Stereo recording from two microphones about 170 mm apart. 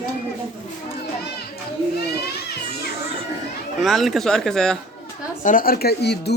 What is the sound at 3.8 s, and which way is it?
Speech, centre (ahead or behind).